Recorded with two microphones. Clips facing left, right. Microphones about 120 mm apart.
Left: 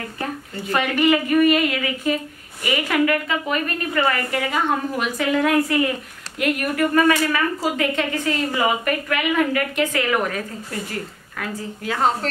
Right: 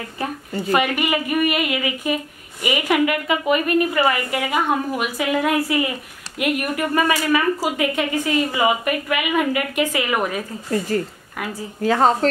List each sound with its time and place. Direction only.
0.7 s a woman's voice: 10° right (ahead or behind)
11.8 s a woman's voice: 40° right (ahead or behind)